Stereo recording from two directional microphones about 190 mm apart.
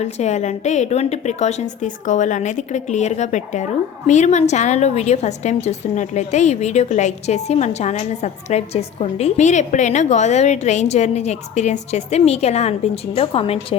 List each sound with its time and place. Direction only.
0.0 s a woman's voice: 35° left (ahead or behind)